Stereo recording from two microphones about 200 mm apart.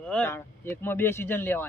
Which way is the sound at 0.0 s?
5° left (ahead or behind).